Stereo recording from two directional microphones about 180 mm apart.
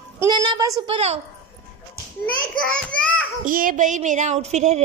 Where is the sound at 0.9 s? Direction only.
35° right (ahead or behind).